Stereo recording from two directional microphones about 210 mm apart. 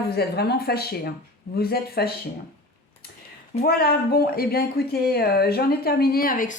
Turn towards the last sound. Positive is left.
turn(degrees=40)  # may be behind; listen again after turning